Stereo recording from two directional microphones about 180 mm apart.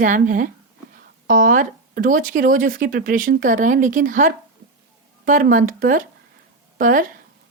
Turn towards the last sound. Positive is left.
turn(degrees=-50)  # may be behind; listen again after turning